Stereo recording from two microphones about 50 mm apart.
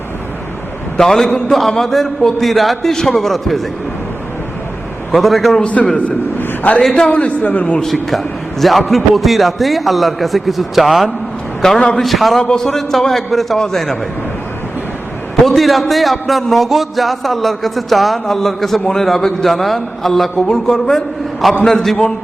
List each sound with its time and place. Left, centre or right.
0.9 s a man's voice: centre
5.1 s a man's voice: centre
5.8 s a man's voice: centre
6.9 s a man's voice: centre
7.2 s a man's voice: left
8.1 s a man's voice: centre
11.6 s a man's voice: centre
12.4 s a man's voice: centre
15.4 s a man's voice: centre